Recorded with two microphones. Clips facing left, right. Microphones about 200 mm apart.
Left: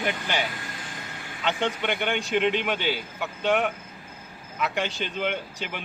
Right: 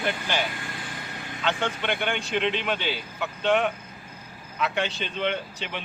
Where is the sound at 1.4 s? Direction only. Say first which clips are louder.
Left 1 dB; 20° left (ahead or behind).